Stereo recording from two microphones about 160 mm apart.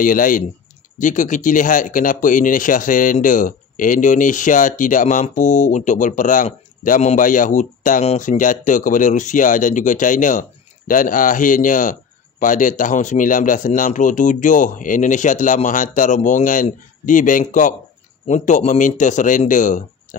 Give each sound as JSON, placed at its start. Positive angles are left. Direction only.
{"t": 0.0, "sound": "speech", "side_deg": 60}